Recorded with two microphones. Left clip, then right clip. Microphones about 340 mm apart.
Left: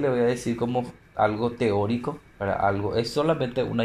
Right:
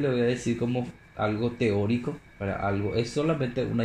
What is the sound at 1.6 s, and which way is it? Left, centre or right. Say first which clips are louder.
Speech: left 3 dB; left.